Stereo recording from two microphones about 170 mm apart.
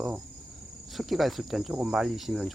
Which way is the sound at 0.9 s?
Centre (ahead or behind).